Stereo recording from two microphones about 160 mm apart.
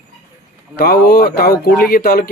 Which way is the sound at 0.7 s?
80° left.